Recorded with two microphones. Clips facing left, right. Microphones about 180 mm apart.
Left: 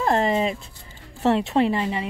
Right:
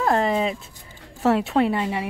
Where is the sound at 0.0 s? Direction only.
Centre (ahead or behind).